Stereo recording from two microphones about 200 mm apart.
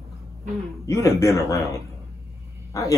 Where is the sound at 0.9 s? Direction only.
15° left (ahead or behind).